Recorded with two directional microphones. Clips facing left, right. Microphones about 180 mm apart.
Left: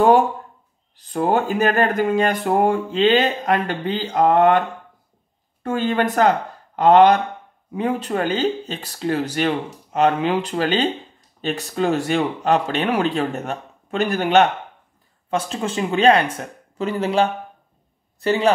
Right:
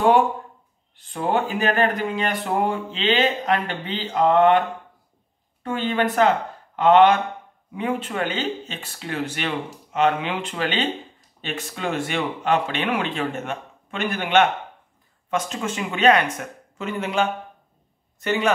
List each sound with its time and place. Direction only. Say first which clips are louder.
0.9 s speech: left 4 dB; 40° left (ahead or behind)
5.6 s speech: left 3 dB; 45° left (ahead or behind)